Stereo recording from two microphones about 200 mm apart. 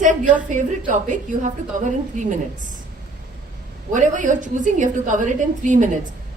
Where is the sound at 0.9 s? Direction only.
40° right (ahead or behind).